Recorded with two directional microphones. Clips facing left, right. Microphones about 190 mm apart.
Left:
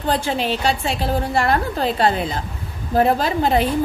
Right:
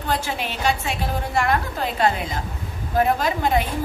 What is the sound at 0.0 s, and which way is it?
A woman's voice, 30° left (ahead or behind).